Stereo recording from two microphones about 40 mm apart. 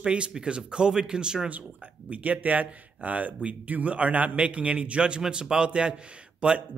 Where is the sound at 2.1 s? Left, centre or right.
Right.